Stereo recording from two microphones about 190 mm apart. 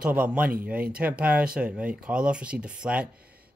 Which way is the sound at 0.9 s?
5° right (ahead or behind).